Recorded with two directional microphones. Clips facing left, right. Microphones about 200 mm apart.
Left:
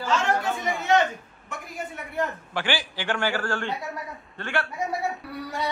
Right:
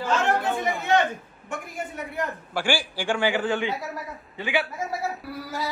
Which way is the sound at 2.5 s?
10° right (ahead or behind).